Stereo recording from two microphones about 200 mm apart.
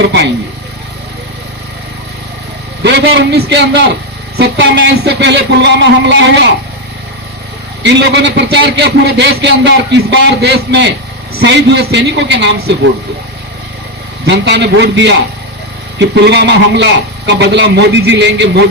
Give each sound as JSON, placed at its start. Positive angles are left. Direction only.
{"t": 2.8, "sound": "a man's voice", "side_deg": -60}
{"t": 7.8, "sound": "a man's voice", "side_deg": -60}
{"t": 14.3, "sound": "a man's voice", "side_deg": -60}